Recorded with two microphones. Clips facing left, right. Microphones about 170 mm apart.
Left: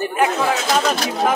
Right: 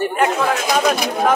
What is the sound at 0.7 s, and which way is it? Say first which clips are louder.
Speech: right 2 dB; 15° right (ahead or behind).